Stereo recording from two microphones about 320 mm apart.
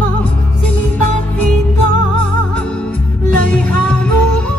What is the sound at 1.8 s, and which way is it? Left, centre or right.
Music, left.